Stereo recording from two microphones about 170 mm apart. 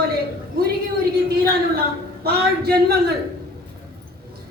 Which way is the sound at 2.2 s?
70° right (ahead or behind).